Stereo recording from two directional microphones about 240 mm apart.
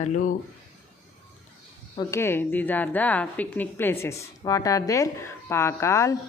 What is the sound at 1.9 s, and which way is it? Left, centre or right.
A woman's voice, centre.